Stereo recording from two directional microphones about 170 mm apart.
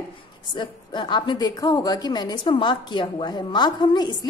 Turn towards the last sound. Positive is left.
turn(degrees=25)  # may be behind; listen again after turning